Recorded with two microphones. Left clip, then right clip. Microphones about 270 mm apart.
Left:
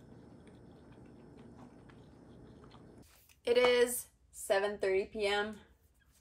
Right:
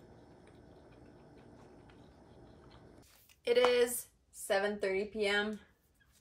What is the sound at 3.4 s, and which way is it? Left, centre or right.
A woman's voice, centre.